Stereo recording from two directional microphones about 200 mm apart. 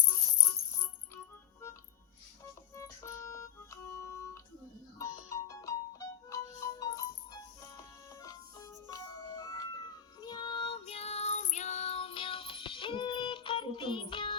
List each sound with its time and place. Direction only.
2.4 s music: 15° left (ahead or behind)